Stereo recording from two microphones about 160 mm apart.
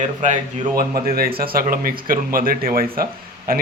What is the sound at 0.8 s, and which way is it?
Speech, 65° right (ahead or behind).